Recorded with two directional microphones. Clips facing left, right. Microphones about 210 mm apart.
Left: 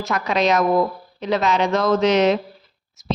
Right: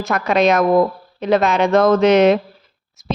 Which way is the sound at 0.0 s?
55° right (ahead or behind).